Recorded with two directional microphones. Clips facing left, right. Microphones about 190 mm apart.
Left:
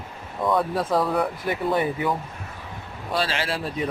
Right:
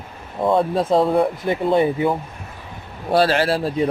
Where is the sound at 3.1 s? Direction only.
45° right (ahead or behind).